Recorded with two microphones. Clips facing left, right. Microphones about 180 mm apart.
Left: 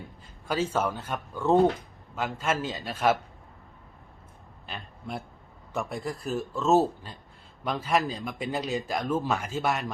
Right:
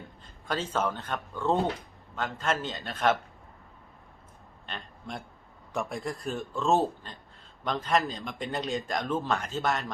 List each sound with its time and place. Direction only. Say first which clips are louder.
0.2 s a man's voice: left 4 dB; 10° left (ahead or behind)
4.6 s a man's voice: left 2 dB; 5° left (ahead or behind)